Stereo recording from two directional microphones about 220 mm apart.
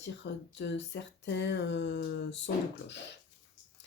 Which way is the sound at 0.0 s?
55° left (ahead or behind).